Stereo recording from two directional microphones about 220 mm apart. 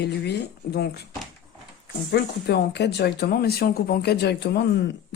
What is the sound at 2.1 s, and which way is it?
Speech, 50° left (ahead or behind).